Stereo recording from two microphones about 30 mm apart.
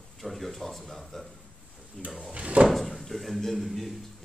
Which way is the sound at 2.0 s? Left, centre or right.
Centre.